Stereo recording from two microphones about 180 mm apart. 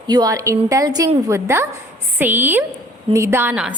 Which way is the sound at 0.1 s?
20° right (ahead or behind).